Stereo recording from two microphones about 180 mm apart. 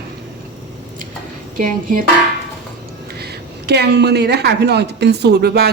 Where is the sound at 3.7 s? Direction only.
65° right (ahead or behind).